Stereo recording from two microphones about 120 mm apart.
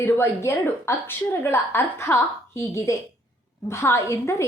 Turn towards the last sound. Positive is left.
turn(degrees=25)  # may be behind; listen again after turning